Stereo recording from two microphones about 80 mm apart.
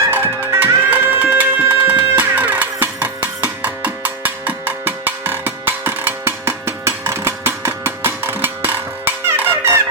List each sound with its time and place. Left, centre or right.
0.1 s music: right